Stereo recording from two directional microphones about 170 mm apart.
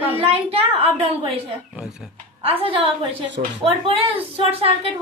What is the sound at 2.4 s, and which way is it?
A woman's voice, 35° right (ahead or behind).